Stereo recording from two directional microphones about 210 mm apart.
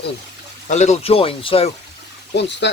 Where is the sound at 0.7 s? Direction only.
35° left (ahead or behind).